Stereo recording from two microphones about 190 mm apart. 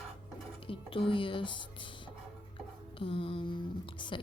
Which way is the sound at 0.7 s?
30° left (ahead or behind).